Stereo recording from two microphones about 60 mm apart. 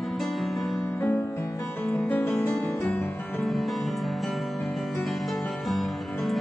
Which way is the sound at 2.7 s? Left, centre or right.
Left.